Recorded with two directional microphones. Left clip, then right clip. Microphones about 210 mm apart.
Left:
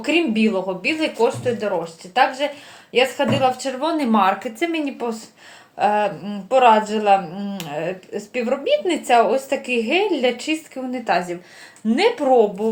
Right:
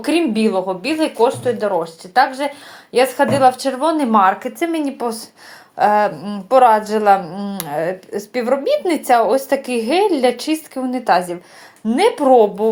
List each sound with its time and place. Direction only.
0.1 s a woman's voice: 30° right (ahead or behind)